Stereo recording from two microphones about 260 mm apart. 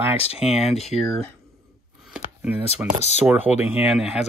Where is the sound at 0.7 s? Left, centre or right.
Left.